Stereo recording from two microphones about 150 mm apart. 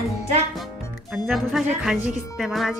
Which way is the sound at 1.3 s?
Centre (ahead or behind).